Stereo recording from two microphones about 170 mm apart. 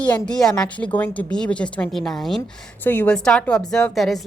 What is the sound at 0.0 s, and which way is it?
A woman's voice, 5° left (ahead or behind).